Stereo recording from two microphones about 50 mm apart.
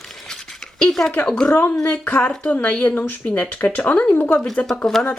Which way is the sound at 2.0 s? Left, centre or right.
Left.